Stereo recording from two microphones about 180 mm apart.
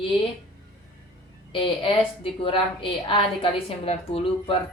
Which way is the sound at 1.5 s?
30° left (ahead or behind).